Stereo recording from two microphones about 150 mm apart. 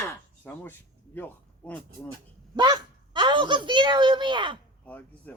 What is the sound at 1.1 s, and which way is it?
Speech, 10° left (ahead or behind).